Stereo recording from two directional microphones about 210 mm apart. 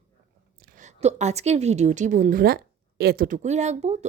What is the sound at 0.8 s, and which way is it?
A woman's voice, 35° right (ahead or behind).